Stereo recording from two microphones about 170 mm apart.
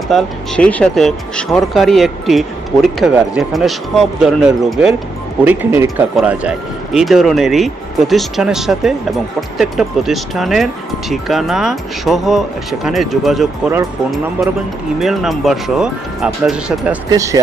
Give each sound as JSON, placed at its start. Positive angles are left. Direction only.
{"t": 0.1, "sound": "speech", "side_deg": 5}
{"t": 14.9, "sound": "speech", "side_deg": 0}
{"t": 17.1, "sound": "speech", "side_deg": -20}